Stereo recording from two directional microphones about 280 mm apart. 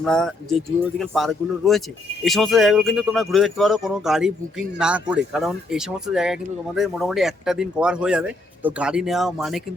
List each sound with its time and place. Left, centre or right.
0.0 s speech: centre